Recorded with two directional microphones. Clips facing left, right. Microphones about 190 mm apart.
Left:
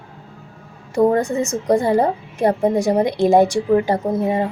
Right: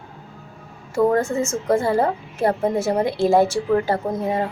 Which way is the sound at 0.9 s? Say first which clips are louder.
Left 2 dB; 15° left (ahead or behind).